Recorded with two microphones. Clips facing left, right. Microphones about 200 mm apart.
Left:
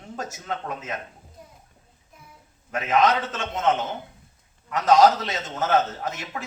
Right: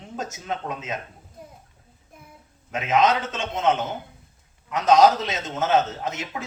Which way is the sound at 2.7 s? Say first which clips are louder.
Even; 20° right (ahead or behind).